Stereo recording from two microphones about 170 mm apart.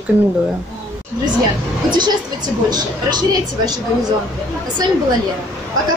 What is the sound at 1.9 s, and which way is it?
A woman's voice, 25° right (ahead or behind).